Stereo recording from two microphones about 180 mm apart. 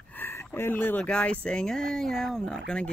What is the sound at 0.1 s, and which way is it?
Speech, 10° left (ahead or behind).